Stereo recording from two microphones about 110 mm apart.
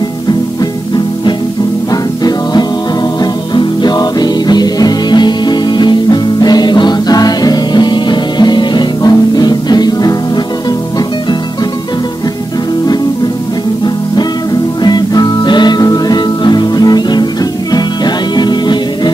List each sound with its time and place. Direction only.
1.9 s music: 35° left (ahead or behind)
14.8 s music: 40° left (ahead or behind)